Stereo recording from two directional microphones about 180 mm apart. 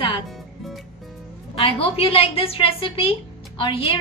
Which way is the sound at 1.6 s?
35° left (ahead or behind).